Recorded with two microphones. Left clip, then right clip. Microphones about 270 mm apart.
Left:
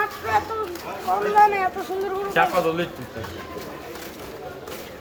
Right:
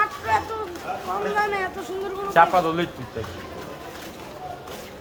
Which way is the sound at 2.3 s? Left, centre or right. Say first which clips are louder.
Right 3 dB; centre.